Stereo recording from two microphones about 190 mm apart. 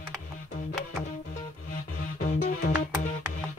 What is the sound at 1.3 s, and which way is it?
Music, 45° left (ahead or behind).